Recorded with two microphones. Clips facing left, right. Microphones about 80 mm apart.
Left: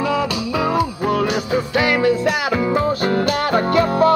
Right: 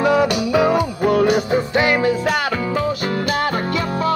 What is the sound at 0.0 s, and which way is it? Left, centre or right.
Music, right.